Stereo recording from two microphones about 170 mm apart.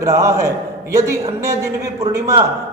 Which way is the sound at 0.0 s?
20° right (ahead or behind).